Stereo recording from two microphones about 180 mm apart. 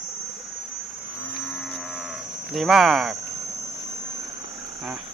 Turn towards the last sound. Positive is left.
turn(degrees=0)  # may be behind; listen again after turning